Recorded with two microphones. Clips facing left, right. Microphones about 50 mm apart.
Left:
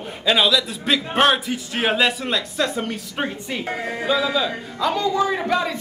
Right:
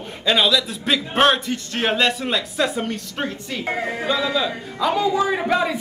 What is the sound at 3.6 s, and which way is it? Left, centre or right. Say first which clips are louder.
Speech: right 4 dB; centre.